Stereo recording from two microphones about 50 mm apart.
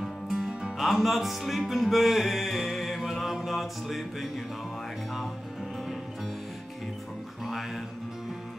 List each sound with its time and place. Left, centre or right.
0.0 s music: centre
0.7 s music: centre
7.4 s music: centre